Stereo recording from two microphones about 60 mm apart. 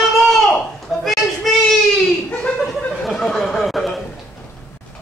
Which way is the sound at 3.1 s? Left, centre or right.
Centre.